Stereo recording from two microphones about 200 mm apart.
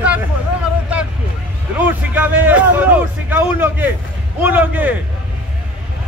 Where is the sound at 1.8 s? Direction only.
10° right (ahead or behind).